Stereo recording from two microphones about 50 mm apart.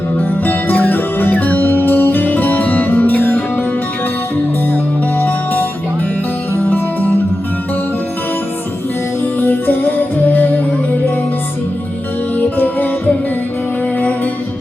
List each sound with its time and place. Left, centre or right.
0.2 s music: left
5.1 s music: left
9.2 s music: left
12.4 s music: left